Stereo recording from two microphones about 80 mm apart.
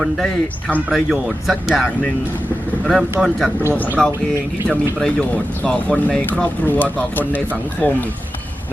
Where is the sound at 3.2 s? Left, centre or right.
Centre.